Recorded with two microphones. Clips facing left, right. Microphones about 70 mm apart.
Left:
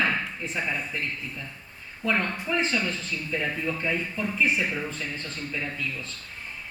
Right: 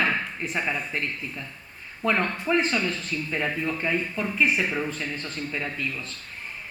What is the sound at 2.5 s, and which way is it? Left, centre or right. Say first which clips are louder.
A man's voice: right 4 dB; right.